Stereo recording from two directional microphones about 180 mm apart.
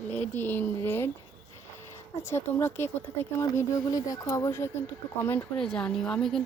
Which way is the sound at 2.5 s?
15° left (ahead or behind).